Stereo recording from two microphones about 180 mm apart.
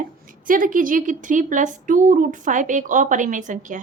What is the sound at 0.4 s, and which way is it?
A woman's voice, 50° right (ahead or behind).